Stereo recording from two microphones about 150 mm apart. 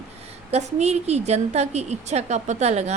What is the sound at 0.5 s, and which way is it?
A woman's voice, 45° right (ahead or behind).